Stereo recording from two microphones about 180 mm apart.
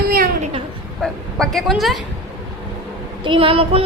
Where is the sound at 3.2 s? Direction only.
30° right (ahead or behind).